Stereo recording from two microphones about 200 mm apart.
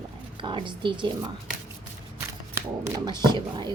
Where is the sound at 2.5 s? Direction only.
15° right (ahead or behind).